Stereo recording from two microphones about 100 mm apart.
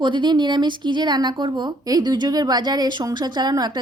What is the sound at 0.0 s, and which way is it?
Speech, 50° right (ahead or behind).